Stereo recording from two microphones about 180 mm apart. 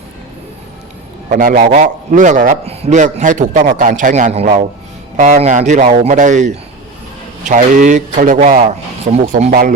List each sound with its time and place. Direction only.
1.3 s a man's voice: 50° right (ahead or behind)